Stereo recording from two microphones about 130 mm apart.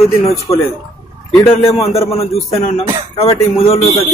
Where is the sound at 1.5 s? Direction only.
50° left (ahead or behind).